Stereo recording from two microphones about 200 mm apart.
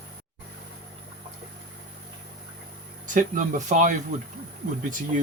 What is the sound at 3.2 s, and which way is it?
Speech, 40° right (ahead or behind).